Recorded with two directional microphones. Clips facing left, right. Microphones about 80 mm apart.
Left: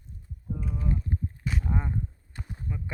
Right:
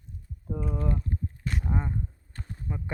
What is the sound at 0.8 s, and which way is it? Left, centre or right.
Speech, right.